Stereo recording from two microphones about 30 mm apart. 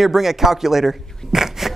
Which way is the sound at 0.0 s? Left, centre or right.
Centre.